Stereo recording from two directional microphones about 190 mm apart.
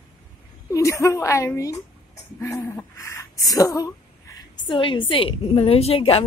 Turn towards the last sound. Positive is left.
turn(degrees=30)  # may be behind; listen again after turning